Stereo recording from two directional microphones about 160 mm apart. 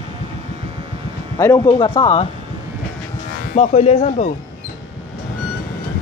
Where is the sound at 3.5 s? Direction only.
45° left (ahead or behind).